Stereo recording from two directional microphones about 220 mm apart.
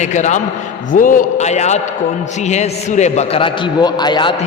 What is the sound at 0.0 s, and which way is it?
A man's voice, 35° left (ahead or behind).